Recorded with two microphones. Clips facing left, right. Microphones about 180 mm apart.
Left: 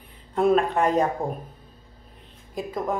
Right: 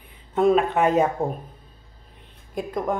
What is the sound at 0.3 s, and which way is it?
Speech, centre (ahead or behind).